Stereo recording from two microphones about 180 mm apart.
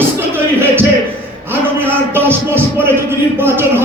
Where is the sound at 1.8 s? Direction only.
10° right (ahead or behind).